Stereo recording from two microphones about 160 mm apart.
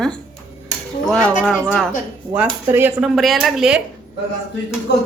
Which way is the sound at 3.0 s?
Centre (ahead or behind).